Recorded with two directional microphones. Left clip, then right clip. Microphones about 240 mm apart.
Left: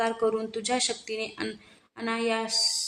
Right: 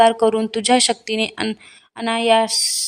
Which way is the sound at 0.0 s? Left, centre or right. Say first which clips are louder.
Right 12 dB; right.